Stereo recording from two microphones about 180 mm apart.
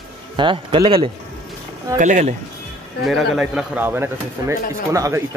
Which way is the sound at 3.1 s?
5° right (ahead or behind).